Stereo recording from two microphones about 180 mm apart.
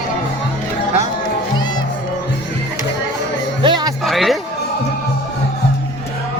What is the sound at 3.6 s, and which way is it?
Music, 25° right (ahead or behind).